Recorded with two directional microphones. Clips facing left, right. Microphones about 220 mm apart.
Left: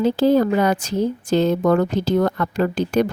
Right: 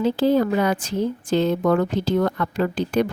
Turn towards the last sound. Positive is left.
turn(degrees=40)  # may be behind; listen again after turning